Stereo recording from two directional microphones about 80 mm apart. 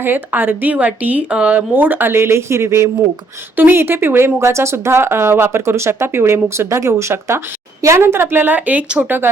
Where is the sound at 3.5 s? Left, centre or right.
Right.